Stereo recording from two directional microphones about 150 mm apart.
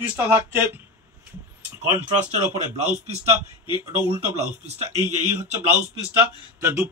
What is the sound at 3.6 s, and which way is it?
Speech, 35° left (ahead or behind).